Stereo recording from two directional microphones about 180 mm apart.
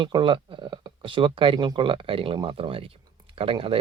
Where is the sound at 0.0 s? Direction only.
25° right (ahead or behind).